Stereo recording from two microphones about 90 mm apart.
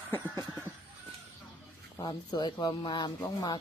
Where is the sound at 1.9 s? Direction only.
50° left (ahead or behind).